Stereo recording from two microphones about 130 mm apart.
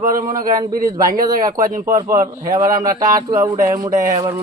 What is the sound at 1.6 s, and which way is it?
Speech, 90° right.